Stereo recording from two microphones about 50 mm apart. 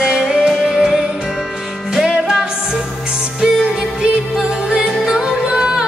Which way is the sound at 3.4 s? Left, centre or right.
Centre.